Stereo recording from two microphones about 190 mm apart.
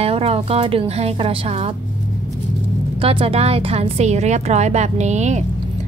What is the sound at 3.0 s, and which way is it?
A woman's voice, 30° right (ahead or behind).